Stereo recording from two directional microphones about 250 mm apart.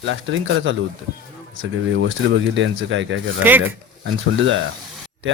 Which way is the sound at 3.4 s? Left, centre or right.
Centre.